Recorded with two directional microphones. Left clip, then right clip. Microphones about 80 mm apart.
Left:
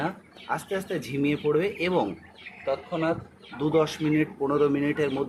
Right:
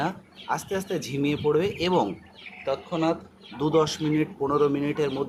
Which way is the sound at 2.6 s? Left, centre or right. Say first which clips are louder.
Right 1 dB; right.